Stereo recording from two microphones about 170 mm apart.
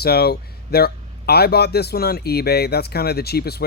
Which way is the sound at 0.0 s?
70° left (ahead or behind).